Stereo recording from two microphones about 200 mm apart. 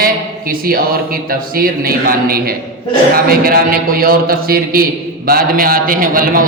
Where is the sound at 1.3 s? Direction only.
50° right (ahead or behind).